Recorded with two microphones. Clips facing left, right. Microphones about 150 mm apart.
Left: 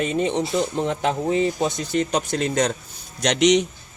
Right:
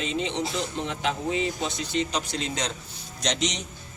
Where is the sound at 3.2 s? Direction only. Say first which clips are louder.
Left 11 dB; 65° left (ahead or behind).